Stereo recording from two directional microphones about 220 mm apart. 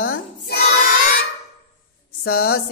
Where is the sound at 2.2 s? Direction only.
45° left (ahead or behind).